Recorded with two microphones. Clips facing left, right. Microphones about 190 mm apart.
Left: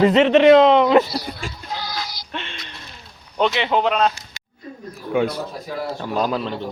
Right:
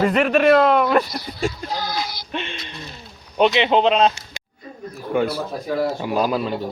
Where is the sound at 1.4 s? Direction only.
45° right (ahead or behind).